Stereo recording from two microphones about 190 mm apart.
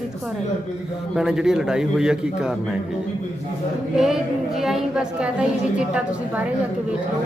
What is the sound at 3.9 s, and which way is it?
A woman's voice, centre (ahead or behind).